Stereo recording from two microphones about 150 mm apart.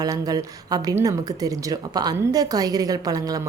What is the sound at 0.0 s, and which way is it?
Speech, 25° right (ahead or behind).